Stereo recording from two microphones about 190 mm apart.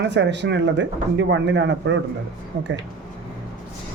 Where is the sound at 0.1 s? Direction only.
65° right (ahead or behind).